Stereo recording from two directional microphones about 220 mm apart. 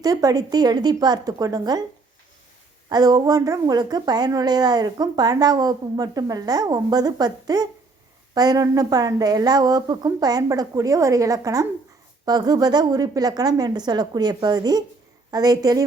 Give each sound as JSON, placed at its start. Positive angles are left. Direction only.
{"t": 0.0, "sound": "a woman's voice", "side_deg": -15}
{"t": 2.9, "sound": "a woman's voice", "side_deg": -15}